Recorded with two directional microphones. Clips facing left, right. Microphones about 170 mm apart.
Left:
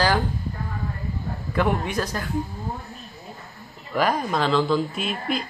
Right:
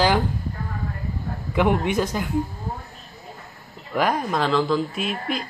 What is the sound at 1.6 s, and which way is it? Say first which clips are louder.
Speech: right 3 dB; 20° right (ahead or behind).